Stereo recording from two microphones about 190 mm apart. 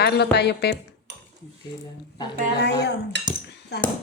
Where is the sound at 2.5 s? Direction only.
60° left (ahead or behind).